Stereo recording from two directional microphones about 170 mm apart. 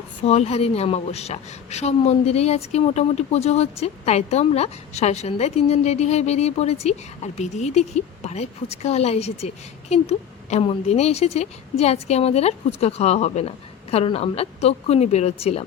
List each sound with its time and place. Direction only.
0.2 s a woman's voice: 35° left (ahead or behind)